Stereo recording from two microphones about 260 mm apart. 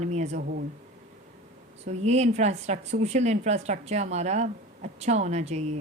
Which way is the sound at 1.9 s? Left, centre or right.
Right.